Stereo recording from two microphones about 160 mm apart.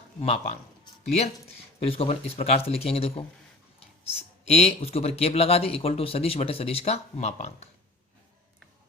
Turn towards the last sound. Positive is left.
turn(degrees=45)  # may be behind; listen again after turning